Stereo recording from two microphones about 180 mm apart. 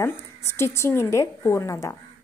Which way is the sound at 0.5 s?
15° left (ahead or behind).